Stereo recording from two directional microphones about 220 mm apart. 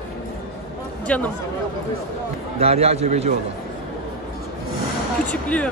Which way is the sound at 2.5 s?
30° right (ahead or behind).